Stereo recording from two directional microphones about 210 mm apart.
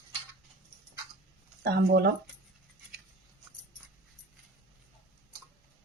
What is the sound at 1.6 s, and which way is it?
Speech, 50° right (ahead or behind).